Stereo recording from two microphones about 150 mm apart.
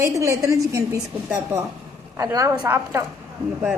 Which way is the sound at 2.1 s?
20° right (ahead or behind).